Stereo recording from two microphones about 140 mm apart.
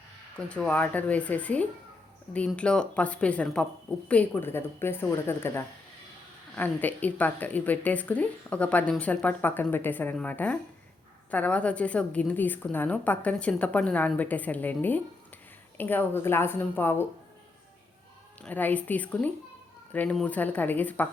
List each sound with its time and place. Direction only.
0.3 s speech: 10° left (ahead or behind)
18.4 s speech: 10° left (ahead or behind)